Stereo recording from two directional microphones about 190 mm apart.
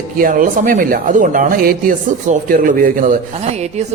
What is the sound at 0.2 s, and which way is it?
Speech, 45° right (ahead or behind).